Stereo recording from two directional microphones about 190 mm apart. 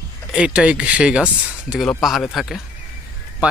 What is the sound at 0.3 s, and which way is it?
Speech, 5° right (ahead or behind).